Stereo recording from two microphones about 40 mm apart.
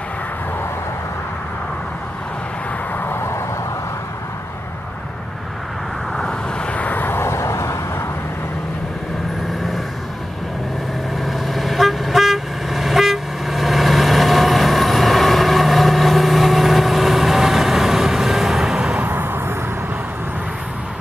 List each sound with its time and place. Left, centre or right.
3.0 s vehicle: left
6.6 s vehicle: left
6.9 s vehicle: left
11.1 s toot: centre
18.9 s vehicle: right